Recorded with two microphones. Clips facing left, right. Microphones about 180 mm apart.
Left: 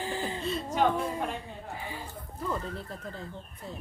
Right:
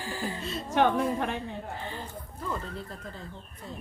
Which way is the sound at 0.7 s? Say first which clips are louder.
Right 4 dB; 75° right (ahead or behind).